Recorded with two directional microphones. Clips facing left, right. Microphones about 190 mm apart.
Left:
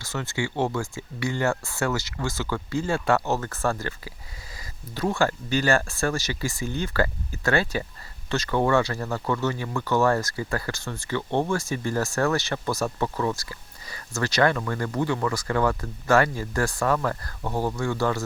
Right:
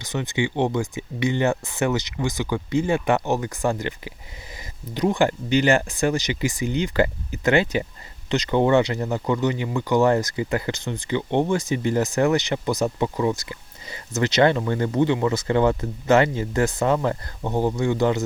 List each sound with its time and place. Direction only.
0.0 s speech: 20° right (ahead or behind)